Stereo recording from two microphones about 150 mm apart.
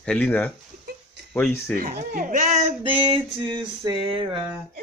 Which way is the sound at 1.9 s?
70° right (ahead or behind).